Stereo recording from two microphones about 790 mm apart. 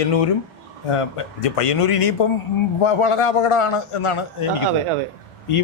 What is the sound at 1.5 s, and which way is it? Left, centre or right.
Speech, left.